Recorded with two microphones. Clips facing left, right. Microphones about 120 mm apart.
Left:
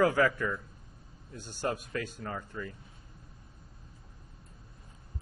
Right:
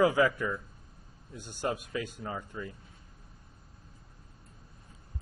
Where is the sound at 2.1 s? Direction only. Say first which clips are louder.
Even; 10° right (ahead or behind).